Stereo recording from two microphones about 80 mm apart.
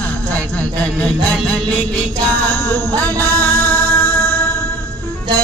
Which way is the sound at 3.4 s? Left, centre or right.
Left.